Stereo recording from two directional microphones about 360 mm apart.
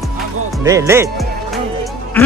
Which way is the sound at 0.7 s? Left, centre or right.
Centre.